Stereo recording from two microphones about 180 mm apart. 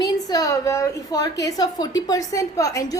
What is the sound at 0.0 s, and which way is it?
A woman's voice, 20° left (ahead or behind).